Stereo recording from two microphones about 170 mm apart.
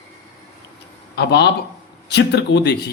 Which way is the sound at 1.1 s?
75° left (ahead or behind).